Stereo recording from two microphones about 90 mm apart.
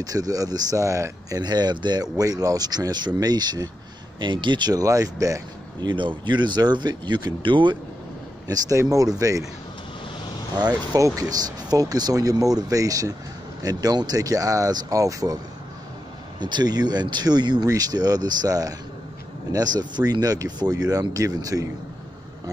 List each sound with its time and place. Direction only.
0.0 s speech: 40° right (ahead or behind)
1.4 s speech: 50° right (ahead or behind)
4.2 s speech: 60° right (ahead or behind); by 5.4 s 40° right (ahead or behind)
5.8 s speech: 60° right (ahead or behind)
8.5 s speech: 40° right (ahead or behind)
10.6 s speech: 45° right (ahead or behind)
16.3 s speech: 55° right (ahead or behind)